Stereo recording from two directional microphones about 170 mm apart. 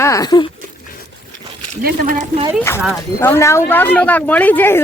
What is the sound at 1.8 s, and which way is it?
Speech, 50° right (ahead or behind).